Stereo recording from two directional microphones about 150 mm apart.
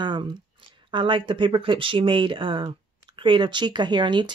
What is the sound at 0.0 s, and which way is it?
Speech, 30° right (ahead or behind).